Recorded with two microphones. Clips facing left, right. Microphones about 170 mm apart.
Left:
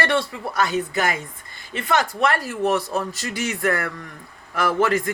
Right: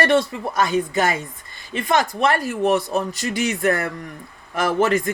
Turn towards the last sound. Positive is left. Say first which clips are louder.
# right 1 dB
turn(degrees=-20)  # may be behind; listen again after turning